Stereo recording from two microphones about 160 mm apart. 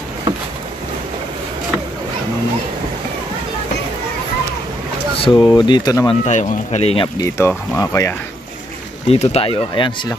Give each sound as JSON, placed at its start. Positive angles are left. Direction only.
{"t": 5.1, "sound": "speech", "side_deg": 30}
{"t": 6.2, "sound": "speech", "side_deg": 45}
{"t": 7.2, "sound": "speech", "side_deg": 15}
{"t": 9.0, "sound": "speech", "side_deg": 40}